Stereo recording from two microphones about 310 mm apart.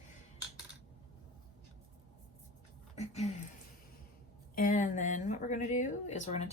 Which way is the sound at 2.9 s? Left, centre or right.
Left.